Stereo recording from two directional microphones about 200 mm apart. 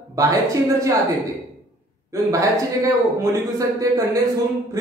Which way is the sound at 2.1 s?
15° right (ahead or behind).